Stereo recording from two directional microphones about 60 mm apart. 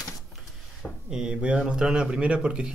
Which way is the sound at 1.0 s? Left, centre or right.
Centre.